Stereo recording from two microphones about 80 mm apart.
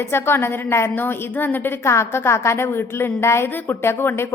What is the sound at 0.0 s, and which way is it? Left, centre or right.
A woman's voice, left.